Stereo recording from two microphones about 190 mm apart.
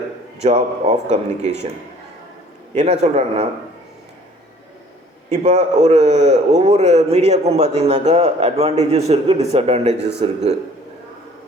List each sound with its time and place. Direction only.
0.3 s a man's voice: 35° right (ahead or behind)
2.7 s a man's voice: 35° right (ahead or behind)
5.3 s a man's voice: 35° right (ahead or behind)